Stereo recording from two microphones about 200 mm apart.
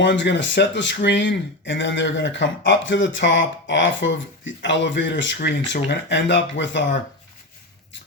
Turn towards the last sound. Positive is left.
turn(degrees=65)  # may be behind; listen again after turning